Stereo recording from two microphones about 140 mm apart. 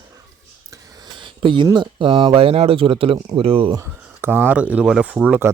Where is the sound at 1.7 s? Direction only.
35° right (ahead or behind).